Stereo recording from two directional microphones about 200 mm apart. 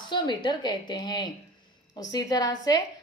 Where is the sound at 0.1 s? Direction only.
20° left (ahead or behind).